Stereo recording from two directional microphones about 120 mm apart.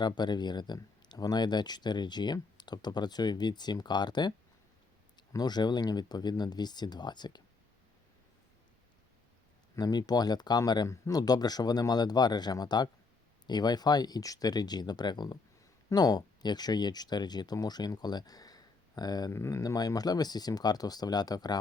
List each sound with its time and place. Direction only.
0.0 s speech: 35° left (ahead or behind)
9.7 s speech: 30° left (ahead or behind)